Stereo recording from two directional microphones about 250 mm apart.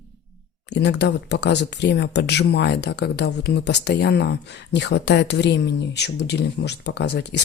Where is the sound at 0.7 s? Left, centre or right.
Left.